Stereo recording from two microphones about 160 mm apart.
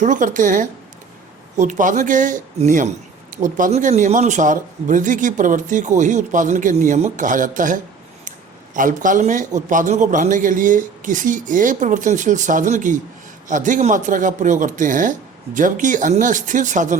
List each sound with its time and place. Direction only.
0.0 s speech: 55° right (ahead or behind)